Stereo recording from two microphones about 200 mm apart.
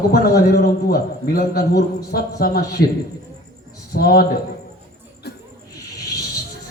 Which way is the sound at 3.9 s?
50° left (ahead or behind).